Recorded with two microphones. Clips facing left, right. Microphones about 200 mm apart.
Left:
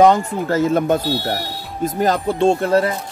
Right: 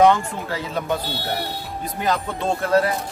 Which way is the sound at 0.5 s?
45° left (ahead or behind).